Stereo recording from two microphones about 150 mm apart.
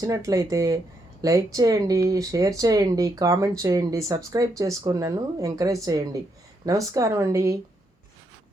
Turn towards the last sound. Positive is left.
turn(degrees=-20)  # may be behind; listen again after turning